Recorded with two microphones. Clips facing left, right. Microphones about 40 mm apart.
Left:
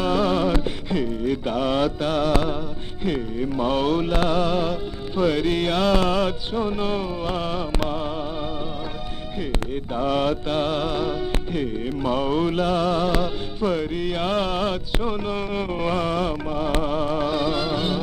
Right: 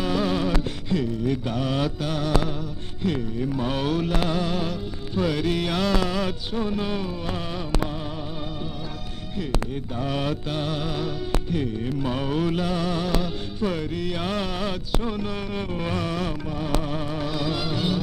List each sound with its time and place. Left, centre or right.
0.0 s music: centre
9.4 s music: centre